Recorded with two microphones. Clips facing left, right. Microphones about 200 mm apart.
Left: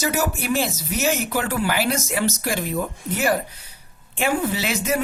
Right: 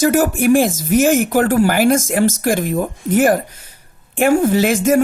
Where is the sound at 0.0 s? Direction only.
50° right (ahead or behind).